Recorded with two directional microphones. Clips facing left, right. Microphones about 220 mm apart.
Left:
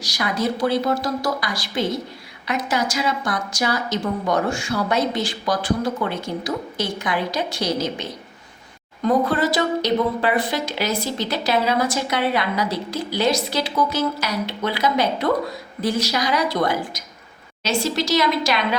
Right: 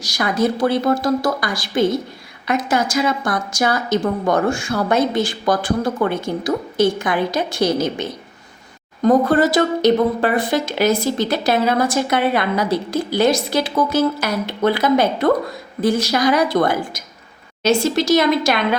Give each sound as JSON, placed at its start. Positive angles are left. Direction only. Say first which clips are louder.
{"t": 0.0, "sound": "a woman's voice", "louder": "right 5 dB", "side_deg": -50}
{"t": 9.0, "sound": "a woman's voice", "louder": "right 5 dB", "side_deg": -45}